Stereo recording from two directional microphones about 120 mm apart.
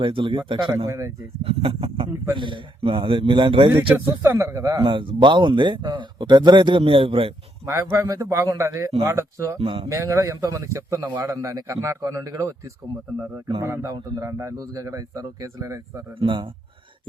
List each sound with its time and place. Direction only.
0.0 s a man's voice: 45° right (ahead or behind)
0.9 s speech: 25° right (ahead or behind)
1.5 s a man's voice: 50° right (ahead or behind)
2.3 s a man's voice: 40° right (ahead or behind)
3.7 s speech: 20° right (ahead or behind)
4.8 s a man's voice: 45° right (ahead or behind)
7.6 s speech: 25° right (ahead or behind)
9.6 s a man's voice: 50° right (ahead or behind)
9.9 s speech: 25° right (ahead or behind)
13.6 s speech: 25° right (ahead or behind)
16.2 s speech: 40° right (ahead or behind)